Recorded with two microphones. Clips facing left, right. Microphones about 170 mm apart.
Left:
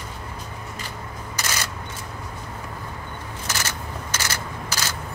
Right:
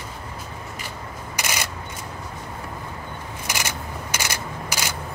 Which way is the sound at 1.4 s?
15° right (ahead or behind).